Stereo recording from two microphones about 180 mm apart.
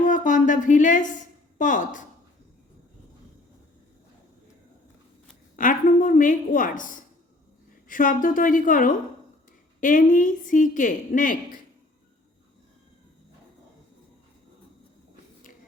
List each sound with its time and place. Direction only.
0.0 s a woman's voice: 45° left (ahead or behind)
5.5 s a woman's voice: 45° left (ahead or behind)